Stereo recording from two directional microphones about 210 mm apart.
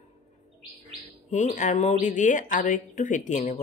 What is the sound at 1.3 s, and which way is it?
Speech, 35° left (ahead or behind).